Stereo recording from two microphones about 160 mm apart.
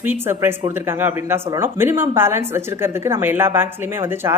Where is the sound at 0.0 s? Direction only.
15° right (ahead or behind).